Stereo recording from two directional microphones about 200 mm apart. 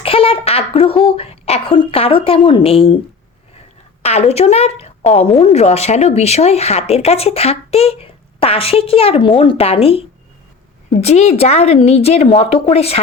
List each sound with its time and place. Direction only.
0.0 s a sound: 30° left (ahead or behind)
1.0 s speech: 30° left (ahead or behind)
4.0 s a woman's voice: 30° left (ahead or behind)